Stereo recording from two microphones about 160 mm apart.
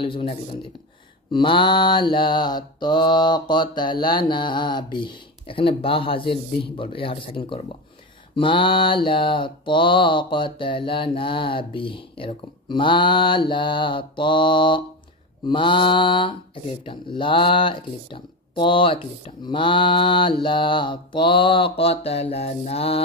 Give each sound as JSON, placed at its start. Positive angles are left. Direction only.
{"t": 0.0, "sound": "mantra", "side_deg": 35}